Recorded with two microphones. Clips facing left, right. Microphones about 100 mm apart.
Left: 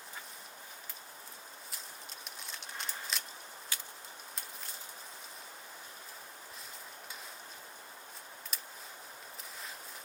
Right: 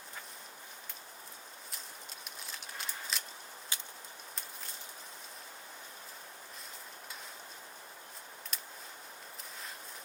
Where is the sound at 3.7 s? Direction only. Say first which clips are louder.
Even; 20° right (ahead or behind).